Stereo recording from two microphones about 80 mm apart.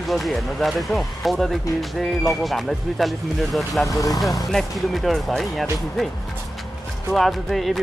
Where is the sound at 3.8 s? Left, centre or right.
Left.